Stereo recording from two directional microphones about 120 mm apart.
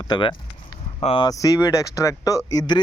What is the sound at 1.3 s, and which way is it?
A man's voice, 30° left (ahead or behind).